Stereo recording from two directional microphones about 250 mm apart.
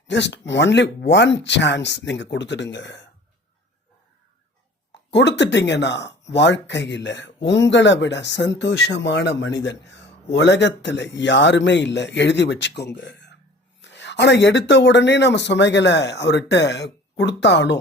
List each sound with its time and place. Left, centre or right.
0.1 s speech: left
5.1 s speech: left